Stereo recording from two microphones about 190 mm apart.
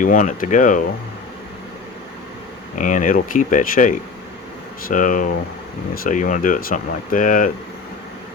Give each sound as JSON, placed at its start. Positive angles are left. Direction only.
{"t": 0.0, "sound": "speech", "side_deg": 40}
{"t": 2.7, "sound": "speech", "side_deg": 40}